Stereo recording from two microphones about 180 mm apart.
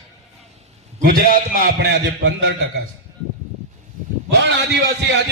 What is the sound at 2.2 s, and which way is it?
Speech, 75° right (ahead or behind).